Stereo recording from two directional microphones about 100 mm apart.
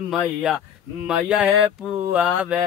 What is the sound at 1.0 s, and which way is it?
Mantra, 10° right (ahead or behind).